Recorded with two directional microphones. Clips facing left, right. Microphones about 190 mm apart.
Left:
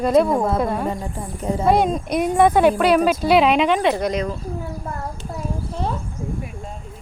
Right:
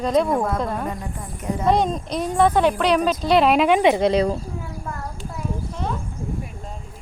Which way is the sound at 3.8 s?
20° right (ahead or behind).